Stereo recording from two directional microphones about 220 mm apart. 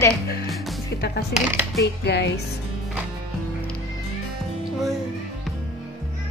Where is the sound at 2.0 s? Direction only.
50° left (ahead or behind).